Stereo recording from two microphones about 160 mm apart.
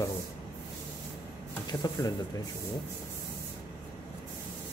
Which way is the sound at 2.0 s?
20° left (ahead or behind).